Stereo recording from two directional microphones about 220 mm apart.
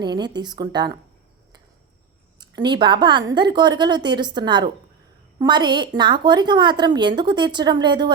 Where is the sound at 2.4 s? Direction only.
20° right (ahead or behind).